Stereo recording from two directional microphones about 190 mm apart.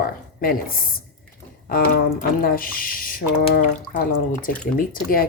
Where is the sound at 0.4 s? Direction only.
45° left (ahead or behind).